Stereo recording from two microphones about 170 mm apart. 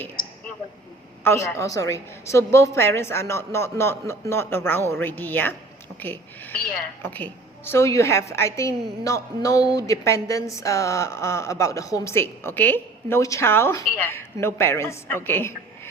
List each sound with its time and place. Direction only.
1.2 s a woman's voice: 15° left (ahead or behind)